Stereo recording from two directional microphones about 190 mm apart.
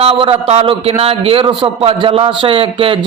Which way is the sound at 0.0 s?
30° right (ahead or behind).